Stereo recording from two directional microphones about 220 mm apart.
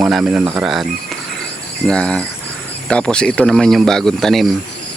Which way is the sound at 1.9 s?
5° left (ahead or behind).